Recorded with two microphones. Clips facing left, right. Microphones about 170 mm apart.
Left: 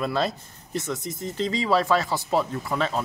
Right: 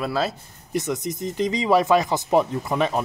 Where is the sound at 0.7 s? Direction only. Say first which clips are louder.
Right 4 dB; 15° right (ahead or behind).